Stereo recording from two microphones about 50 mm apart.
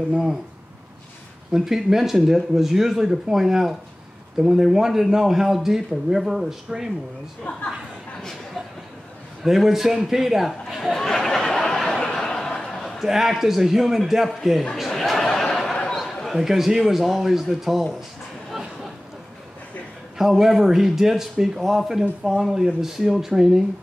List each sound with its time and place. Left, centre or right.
1.5 s speech: centre
7.5 s a woman's voice: left
9.4 s a man's voice: centre
12.4 s a sound: centre
13.0 s a man's voice: centre
14.9 s a sound: centre
16.0 s a man's voice: centre
20.2 s speech: centre